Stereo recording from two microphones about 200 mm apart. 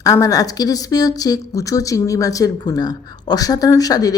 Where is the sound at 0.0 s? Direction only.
15° left (ahead or behind).